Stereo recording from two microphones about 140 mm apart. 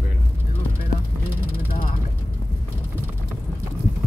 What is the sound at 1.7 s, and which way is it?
Vehicle, 90° left.